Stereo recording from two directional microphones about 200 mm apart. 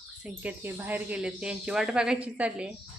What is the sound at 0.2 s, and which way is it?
A woman's voice, 10° right (ahead or behind).